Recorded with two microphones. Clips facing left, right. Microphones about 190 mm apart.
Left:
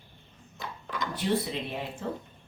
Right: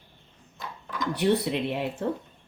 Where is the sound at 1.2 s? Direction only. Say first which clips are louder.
Right 5 dB; 70° right (ahead or behind).